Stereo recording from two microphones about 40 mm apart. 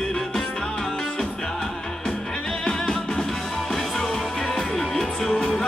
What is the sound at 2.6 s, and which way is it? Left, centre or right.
Music, centre.